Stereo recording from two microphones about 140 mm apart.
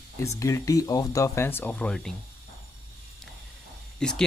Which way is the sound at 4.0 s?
5° left (ahead or behind).